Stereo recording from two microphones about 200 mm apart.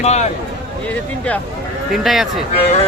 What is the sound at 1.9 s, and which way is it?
Speech, centre (ahead or behind).